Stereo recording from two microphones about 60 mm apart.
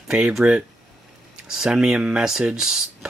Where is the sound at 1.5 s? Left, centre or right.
Centre.